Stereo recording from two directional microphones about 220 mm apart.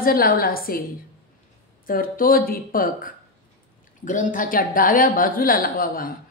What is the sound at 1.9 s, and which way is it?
Speech, 40° left (ahead or behind).